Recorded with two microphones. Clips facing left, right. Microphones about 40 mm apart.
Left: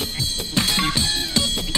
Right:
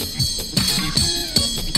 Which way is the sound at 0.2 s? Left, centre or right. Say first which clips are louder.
Even; left.